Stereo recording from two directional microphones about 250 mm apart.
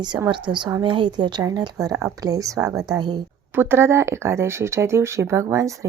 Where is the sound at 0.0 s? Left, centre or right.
Centre.